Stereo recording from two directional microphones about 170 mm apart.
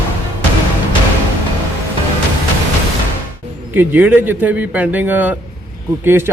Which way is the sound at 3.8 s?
10° right (ahead or behind).